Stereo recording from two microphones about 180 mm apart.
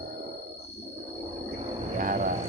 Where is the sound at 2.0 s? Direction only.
50° right (ahead or behind).